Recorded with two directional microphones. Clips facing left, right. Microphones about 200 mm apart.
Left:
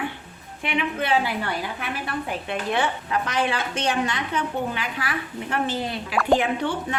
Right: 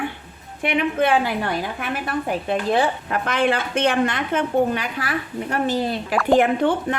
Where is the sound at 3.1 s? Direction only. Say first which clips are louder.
Right 4 dB; 55° right (ahead or behind).